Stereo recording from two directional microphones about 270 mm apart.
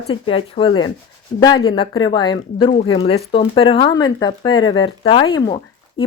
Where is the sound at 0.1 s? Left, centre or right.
Centre.